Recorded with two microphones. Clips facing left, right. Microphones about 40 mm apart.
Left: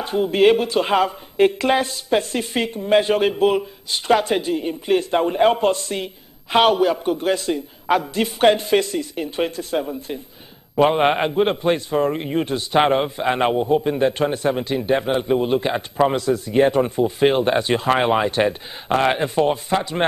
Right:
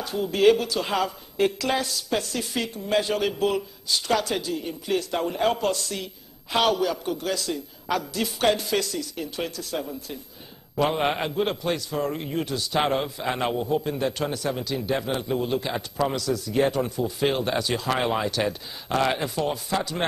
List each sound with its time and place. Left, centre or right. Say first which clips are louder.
0.0 s a man's voice: left 4 dB; left